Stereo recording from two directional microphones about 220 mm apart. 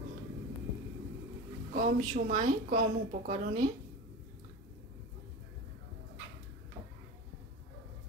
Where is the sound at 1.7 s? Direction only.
35° right (ahead or behind).